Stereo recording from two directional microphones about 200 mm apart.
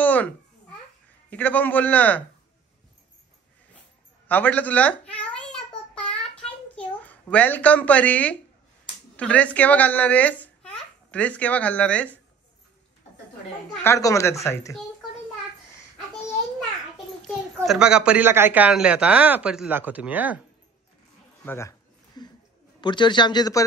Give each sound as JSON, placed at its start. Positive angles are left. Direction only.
{"t": 0.0, "sound": "babbling", "side_deg": 10}
{"t": 1.3, "sound": "a man's voice", "side_deg": 10}
{"t": 4.3, "sound": "a sound", "side_deg": 10}
{"t": 9.1, "sound": "a child's voice", "side_deg": 5}
{"t": 13.8, "sound": "a man's voice", "side_deg": 15}
{"t": 16.3, "sound": "a sound", "side_deg": 0}
{"t": 17.6, "sound": "speech", "side_deg": 0}
{"t": 21.5, "sound": "a sound", "side_deg": 15}
{"t": 22.8, "sound": "speech", "side_deg": 25}